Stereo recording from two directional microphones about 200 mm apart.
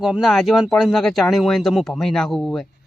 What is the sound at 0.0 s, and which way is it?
Speech, centre (ahead or behind).